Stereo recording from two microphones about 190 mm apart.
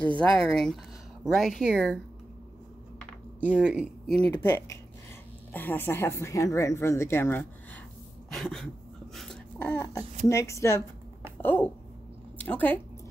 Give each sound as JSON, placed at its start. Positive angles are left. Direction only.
{"t": 0.2, "sound": "speech", "side_deg": 0}
{"t": 3.3, "sound": "speech", "side_deg": -5}
{"t": 4.2, "sound": "speech", "side_deg": 10}
{"t": 9.1, "sound": "a sound", "side_deg": 5}
{"t": 10.2, "sound": "speech", "side_deg": 15}